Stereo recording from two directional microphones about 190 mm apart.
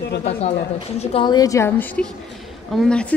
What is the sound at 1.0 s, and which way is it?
A woman's voice, 30° left (ahead or behind).